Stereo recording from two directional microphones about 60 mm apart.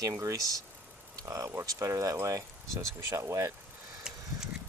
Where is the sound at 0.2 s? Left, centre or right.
Right.